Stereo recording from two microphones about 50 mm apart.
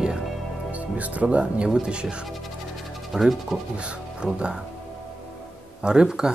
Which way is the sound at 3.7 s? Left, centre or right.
Right.